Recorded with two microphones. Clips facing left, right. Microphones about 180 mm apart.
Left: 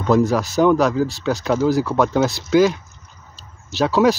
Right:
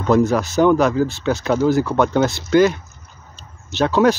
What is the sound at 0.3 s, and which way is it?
Speech, centre (ahead or behind).